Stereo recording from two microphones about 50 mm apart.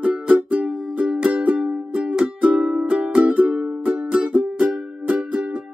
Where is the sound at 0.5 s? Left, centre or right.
Centre.